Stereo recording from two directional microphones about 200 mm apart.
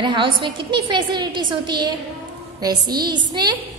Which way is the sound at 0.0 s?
25° right (ahead or behind).